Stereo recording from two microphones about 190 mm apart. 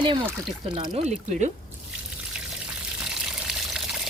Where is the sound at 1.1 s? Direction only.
40° right (ahead or behind).